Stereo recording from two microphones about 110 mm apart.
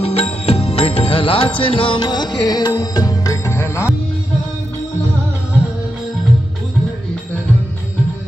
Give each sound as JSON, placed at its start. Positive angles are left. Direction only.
{"t": 0.0, "sound": "music", "side_deg": 65}